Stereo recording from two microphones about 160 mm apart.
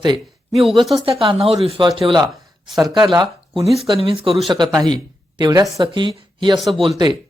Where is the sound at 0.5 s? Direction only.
Centre (ahead or behind).